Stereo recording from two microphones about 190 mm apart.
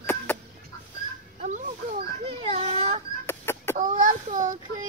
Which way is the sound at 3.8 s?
45° right (ahead or behind).